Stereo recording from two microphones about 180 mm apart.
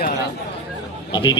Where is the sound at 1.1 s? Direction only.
25° left (ahead or behind).